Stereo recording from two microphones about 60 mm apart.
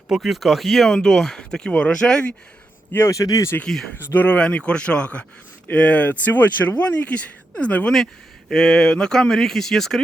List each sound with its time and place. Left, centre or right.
0.1 s speech: centre
3.1 s speech: left
3.9 s speech: left
4.3 s speech: centre
8.4 s speech: centre